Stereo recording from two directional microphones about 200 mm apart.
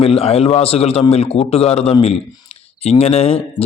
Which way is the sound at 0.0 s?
30° left (ahead or behind).